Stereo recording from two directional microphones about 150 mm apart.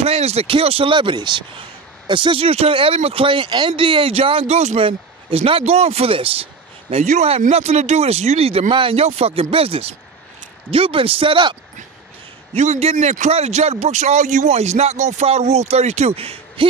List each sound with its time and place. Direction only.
0.0 s speech: 45° right (ahead or behind)
12.5 s a man's voice: 45° right (ahead or behind)
12.9 s a man's voice: 55° right (ahead or behind)